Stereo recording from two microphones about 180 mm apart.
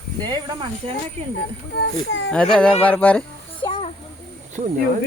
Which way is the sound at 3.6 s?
30° left (ahead or behind).